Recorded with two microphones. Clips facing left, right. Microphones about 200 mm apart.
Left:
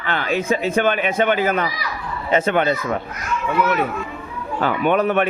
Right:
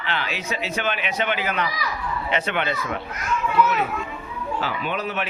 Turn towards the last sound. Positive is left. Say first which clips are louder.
# left 10 dB
turn(degrees=55)  # may be behind; listen again after turning